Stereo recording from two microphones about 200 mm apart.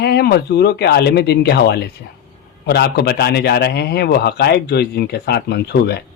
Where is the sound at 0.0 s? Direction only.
50° left (ahead or behind).